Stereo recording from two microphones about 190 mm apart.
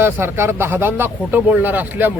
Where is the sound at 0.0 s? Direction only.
10° right (ahead or behind).